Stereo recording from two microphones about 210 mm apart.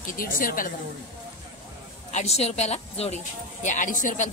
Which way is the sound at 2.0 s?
30° left (ahead or behind).